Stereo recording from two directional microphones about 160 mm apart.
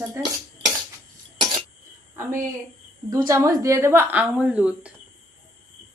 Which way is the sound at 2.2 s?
15° right (ahead or behind).